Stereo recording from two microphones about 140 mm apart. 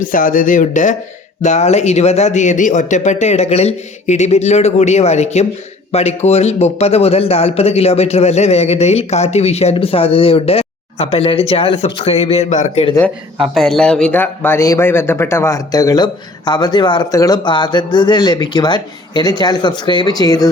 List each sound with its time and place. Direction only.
0.0 s a man's voice: 75° left (ahead or behind); by 12.8 s 60° left (ahead or behind)
13.5 s speech: 5° left (ahead or behind); by 20.5 s 25° left (ahead or behind)